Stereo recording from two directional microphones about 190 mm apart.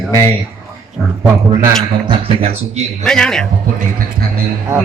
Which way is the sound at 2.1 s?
30° right (ahead or behind).